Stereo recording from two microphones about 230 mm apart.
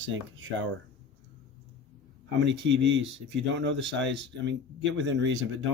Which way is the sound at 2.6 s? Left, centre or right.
Right.